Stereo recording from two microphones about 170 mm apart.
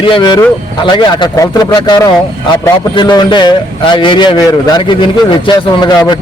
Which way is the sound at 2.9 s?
25° left (ahead or behind).